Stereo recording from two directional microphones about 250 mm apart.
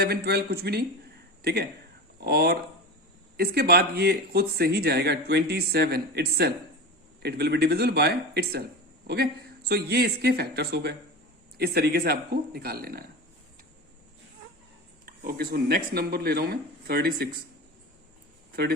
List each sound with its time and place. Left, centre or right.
0.0 s speech: right
15.0 s speech: right